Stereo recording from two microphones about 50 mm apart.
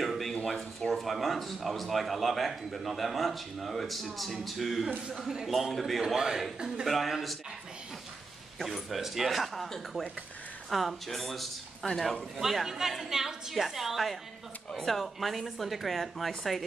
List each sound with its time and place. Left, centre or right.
0.0 s a sound: centre
0.5 s speech: centre
8.9 s speech: centre
10.7 s speech: centre
14.7 s speech: centre
15.0 s speech: centre